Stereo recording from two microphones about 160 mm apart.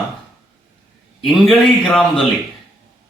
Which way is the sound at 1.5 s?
5° left (ahead or behind).